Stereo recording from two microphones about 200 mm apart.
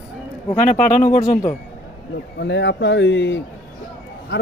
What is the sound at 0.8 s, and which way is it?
Speech, 40° left (ahead or behind).